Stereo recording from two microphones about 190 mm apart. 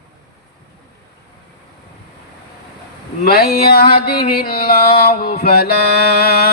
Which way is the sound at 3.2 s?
55° left (ahead or behind).